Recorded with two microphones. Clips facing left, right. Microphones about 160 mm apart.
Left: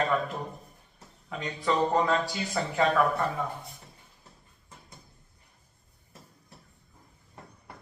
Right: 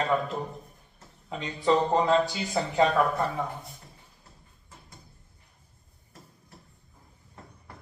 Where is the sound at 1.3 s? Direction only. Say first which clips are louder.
Right 4 dB; 25° right (ahead or behind).